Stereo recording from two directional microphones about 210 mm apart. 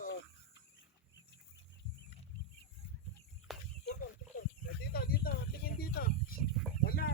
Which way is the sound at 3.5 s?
Centre (ahead or behind).